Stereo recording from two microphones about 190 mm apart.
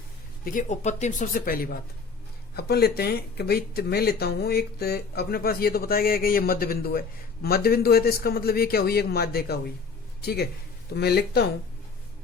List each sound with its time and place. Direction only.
0.4 s speech: 40° left (ahead or behind); by 11.5 s 60° left (ahead or behind)